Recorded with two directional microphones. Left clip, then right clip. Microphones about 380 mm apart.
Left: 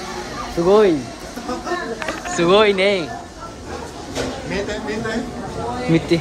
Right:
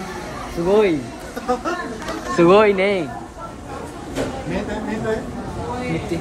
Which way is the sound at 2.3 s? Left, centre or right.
Centre.